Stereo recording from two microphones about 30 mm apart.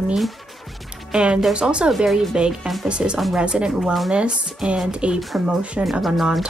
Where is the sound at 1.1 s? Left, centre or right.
Right.